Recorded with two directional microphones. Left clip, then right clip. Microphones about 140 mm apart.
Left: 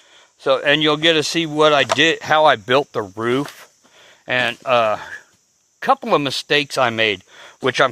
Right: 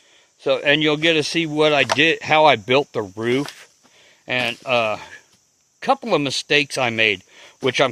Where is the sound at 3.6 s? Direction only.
15° right (ahead or behind).